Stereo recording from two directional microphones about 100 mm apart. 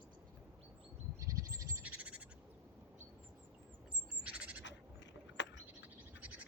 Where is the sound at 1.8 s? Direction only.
15° right (ahead or behind).